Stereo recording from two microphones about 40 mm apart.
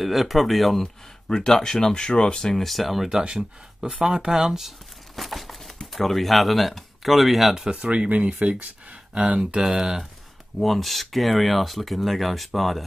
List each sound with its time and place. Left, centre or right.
0.0 s speech: centre
1.3 s speech: centre
3.8 s speech: right; by 7.5 s centre
7.7 s speech: right
9.6 s speech: centre
10.6 s speech: centre